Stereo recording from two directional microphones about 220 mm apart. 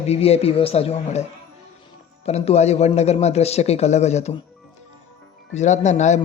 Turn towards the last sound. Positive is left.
turn(degrees=30)  # may be behind; listen again after turning